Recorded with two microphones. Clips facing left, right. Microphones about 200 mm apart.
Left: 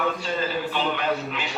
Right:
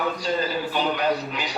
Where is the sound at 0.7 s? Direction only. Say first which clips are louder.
Right 4 dB; 40° right (ahead or behind).